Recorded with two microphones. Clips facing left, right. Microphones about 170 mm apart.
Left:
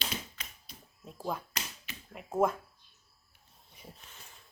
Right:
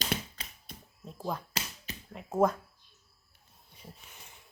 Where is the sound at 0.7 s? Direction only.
55° right (ahead or behind).